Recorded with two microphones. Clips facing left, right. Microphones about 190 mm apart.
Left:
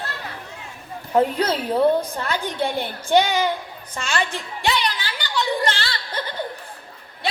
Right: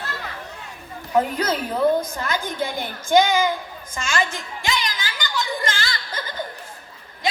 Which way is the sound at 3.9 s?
35° left (ahead or behind).